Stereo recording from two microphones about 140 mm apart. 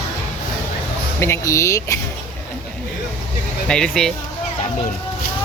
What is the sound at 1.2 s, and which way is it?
Speech, 20° left (ahead or behind).